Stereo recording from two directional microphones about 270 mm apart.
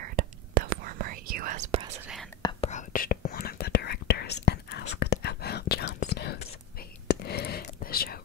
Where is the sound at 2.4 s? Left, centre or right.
Left.